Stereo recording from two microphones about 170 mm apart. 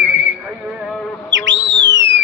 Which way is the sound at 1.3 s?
90° right.